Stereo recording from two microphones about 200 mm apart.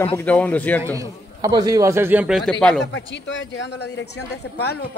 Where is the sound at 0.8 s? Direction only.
15° right (ahead or behind); by 2.8 s 5° left (ahead or behind).